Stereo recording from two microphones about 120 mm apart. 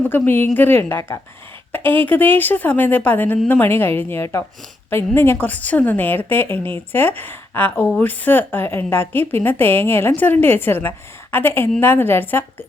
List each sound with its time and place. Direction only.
0.0 s a woman's voice: 15° left (ahead or behind)